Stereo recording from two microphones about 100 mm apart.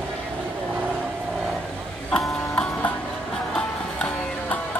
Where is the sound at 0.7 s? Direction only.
15° right (ahead or behind).